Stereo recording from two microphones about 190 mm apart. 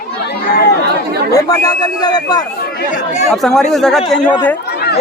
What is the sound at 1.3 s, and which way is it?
Speech, 20° left (ahead or behind).